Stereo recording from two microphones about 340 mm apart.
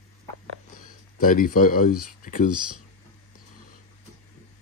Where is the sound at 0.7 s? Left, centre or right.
Left.